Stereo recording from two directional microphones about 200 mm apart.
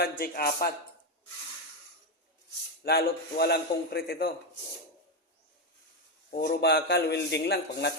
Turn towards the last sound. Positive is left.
turn(degrees=55)  # may be behind; listen again after turning